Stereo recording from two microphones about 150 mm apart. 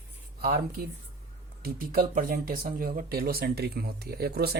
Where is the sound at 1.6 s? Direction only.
75° right (ahead or behind).